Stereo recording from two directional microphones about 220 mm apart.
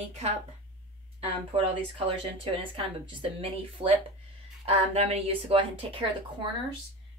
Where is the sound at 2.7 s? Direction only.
25° right (ahead or behind).